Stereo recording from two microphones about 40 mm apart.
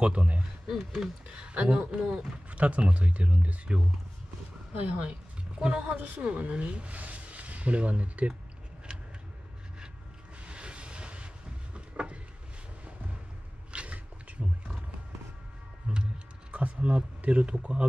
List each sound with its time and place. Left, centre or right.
0.0 s speech: right
0.7 s speech: centre
1.3 s speech: right
2.5 s speech: right
5.6 s speech: right
5.9 s speech: right
6.2 s speech: right
10.4 s vehicle: right
11.7 s a sound: right
13.7 s roaring cats: right
15.9 s a sound: right
16.5 s a man's voice: right